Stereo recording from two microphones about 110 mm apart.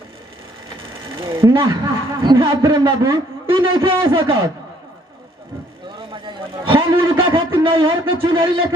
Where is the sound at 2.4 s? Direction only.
45° right (ahead or behind).